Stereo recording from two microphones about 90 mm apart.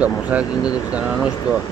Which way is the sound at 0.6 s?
45° left (ahead or behind).